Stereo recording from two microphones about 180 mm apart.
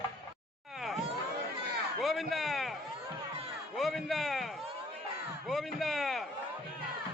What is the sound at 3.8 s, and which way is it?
Speech, centre (ahead or behind).